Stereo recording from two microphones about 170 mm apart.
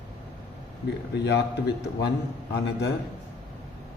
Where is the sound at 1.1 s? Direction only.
80° left.